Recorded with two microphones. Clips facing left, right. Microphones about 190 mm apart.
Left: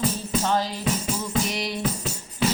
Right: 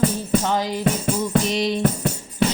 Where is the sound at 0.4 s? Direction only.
15° right (ahead or behind).